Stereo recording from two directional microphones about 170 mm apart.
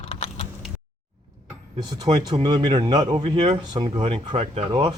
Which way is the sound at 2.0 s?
25° right (ahead or behind).